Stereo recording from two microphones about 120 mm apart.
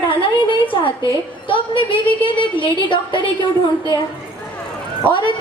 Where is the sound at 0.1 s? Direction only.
45° left (ahead or behind).